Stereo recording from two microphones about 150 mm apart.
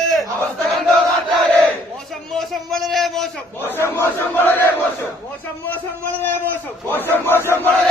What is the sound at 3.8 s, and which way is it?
A man's voice, 15° left (ahead or behind).